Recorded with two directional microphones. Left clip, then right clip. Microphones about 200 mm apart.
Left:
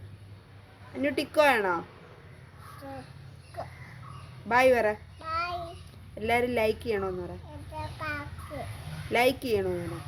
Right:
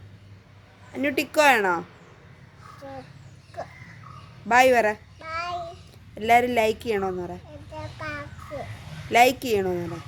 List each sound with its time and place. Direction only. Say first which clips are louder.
0.9 s a woman's voice: right 3 dB; 45° right (ahead or behind)
2.8 s a sound: right 3 dB; 10° right (ahead or behind)
4.4 s a woman's voice: right 5 dB; 45° right (ahead or behind)
5.2 s child singing: right 1 dB; 15° right (ahead or behind)
6.1 s a woman's voice: right 7 dB; 45° right (ahead or behind)
7.9 s a sound: right 1 dB; 10° right (ahead or behind)
9.1 s a woman's voice: right 6 dB; 45° right (ahead or behind)